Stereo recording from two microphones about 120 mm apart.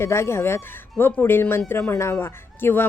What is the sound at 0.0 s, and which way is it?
A woman's voice, 20° left (ahead or behind).